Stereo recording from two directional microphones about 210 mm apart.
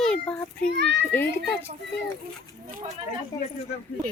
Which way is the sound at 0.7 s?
55° right (ahead or behind).